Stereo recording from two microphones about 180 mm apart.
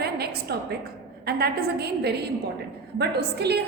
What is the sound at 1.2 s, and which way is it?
A woman's voice, 60° right (ahead or behind).